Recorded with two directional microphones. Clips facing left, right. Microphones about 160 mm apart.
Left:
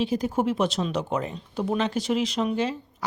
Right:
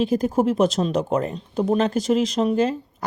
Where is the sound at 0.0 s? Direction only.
45° right (ahead or behind).